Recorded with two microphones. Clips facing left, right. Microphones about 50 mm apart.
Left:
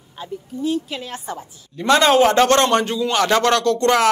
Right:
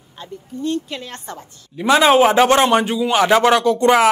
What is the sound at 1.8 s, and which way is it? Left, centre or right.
A man's voice, centre.